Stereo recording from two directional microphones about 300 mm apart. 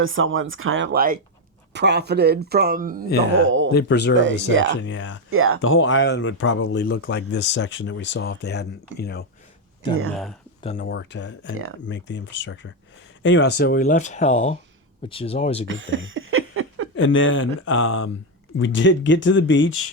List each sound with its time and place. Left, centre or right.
0.0 s speech: right
3.7 s speech: left
4.2 s speech: right
4.8 s speech: left
5.3 s speech: right
5.6 s speech: left
9.9 s speech: right
10.6 s speech: centre
10.8 s speech: left; by 15.6 s centre
15.6 s a sound: right
16.9 s speech: left